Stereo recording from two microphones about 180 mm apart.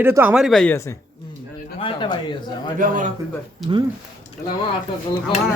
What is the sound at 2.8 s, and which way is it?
Speech, 50° right (ahead or behind).